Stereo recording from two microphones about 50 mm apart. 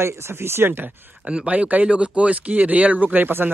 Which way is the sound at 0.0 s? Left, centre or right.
Right.